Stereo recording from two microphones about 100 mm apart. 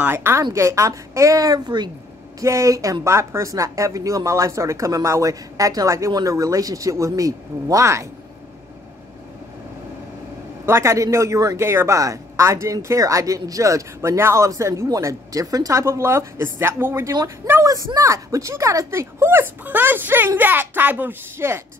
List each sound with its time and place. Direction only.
0.0 s speech: 25° right (ahead or behind); by 1.9 s 45° right (ahead or behind)
2.4 s speech: 30° right (ahead or behind)
10.6 s speech: 30° right (ahead or behind)